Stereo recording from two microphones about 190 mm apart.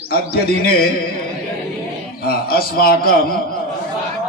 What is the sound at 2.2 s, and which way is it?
A man's voice, 50° left (ahead or behind).